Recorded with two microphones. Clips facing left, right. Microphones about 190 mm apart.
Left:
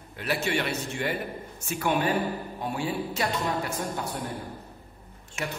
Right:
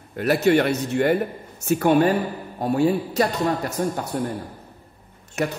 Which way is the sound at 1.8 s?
45° right (ahead or behind).